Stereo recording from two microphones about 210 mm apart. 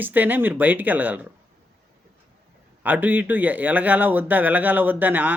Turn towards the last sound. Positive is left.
turn(degrees=-10)  # may be behind; listen again after turning